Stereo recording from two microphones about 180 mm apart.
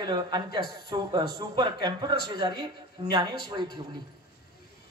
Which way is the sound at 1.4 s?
25° right (ahead or behind).